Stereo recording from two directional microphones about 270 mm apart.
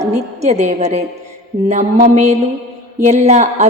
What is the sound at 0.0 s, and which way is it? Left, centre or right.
A woman's voice, right.